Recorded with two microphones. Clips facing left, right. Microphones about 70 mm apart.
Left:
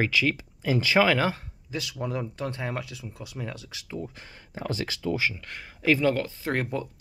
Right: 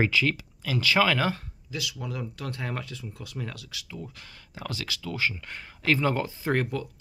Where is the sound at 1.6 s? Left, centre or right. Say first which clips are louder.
Left 3 dB; left.